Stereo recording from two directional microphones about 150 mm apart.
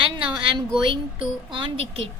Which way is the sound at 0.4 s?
30° right (ahead or behind).